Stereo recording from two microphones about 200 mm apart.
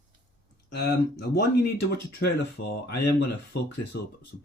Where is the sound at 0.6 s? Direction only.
55° left (ahead or behind).